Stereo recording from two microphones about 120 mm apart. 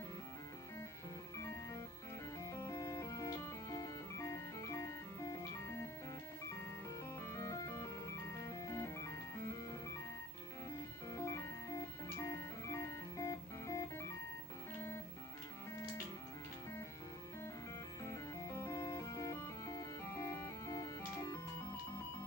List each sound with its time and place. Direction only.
2.4 s music: 25° left (ahead or behind)
7.2 s music: 25° left (ahead or behind)
11.1 s music: 25° left (ahead or behind)
18.0 s music: 25° left (ahead or behind)